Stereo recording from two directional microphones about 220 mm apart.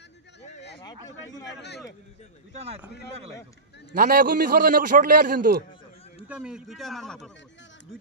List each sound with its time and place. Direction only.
0.9 s speech: 15° left (ahead or behind)
2.6 s speech: 30° right (ahead or behind)
4.0 s a man's voice: 40° right (ahead or behind)
6.2 s speech: 5° right (ahead or behind)